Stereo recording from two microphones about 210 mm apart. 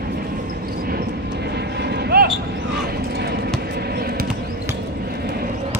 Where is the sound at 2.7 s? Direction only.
50° right (ahead or behind).